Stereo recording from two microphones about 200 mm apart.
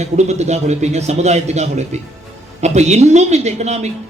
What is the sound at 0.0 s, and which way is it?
A man's voice, 35° right (ahead or behind).